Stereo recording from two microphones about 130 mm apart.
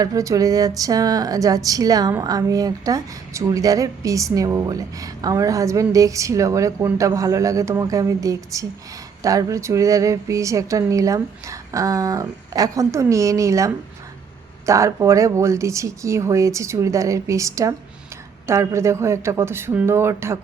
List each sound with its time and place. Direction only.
0.0 s speech: 25° right (ahead or behind)